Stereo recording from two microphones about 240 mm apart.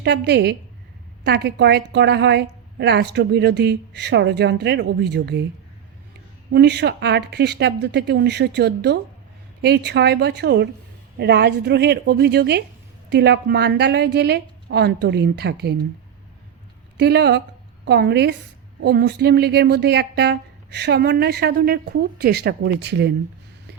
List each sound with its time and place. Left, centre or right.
0.0 s a woman's voice: right
6.5 s a woman's voice: right
17.0 s a woman's voice: right